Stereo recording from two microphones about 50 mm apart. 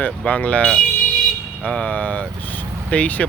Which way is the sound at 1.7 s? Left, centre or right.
Left.